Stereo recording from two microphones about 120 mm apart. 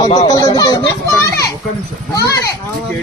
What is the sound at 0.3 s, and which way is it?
Speech, 35° left (ahead or behind).